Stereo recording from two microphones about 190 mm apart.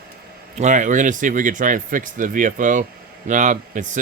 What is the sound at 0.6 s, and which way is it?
Speech, 40° right (ahead or behind).